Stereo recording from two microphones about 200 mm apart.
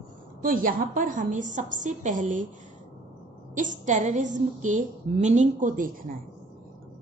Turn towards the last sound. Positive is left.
turn(degrees=-45)  # may be behind; listen again after turning